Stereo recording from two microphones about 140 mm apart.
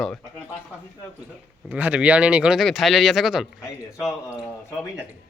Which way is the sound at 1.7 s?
10° right (ahead or behind).